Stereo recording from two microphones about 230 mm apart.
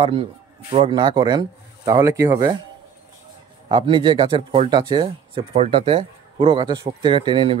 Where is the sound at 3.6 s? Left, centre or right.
Right.